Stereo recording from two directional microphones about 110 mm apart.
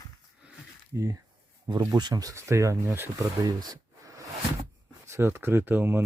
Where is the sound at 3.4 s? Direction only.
35° right (ahead or behind).